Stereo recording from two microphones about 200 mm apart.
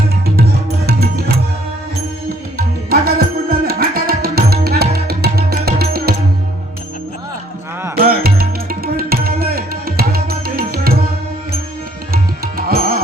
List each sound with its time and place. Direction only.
0.9 s music: 50° right (ahead or behind)
2.9 s tabla: 50° right (ahead or behind)
7.9 s music: 50° right (ahead or behind)
12.1 s music: 50° right (ahead or behind)